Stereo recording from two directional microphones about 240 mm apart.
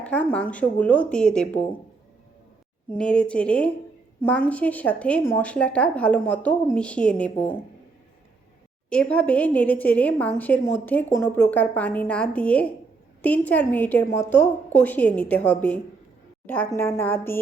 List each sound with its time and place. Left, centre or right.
0.0 s a woman's voice: centre
2.9 s a woman's voice: centre
8.9 s a woman's voice: centre